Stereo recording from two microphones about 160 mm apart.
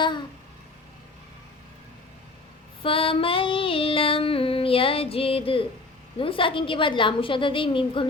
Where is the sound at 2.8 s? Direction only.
35° left (ahead or behind).